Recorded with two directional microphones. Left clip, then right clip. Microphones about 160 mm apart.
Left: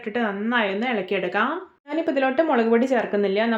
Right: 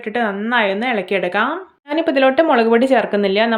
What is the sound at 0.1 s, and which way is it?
A woman's voice, 25° right (ahead or behind).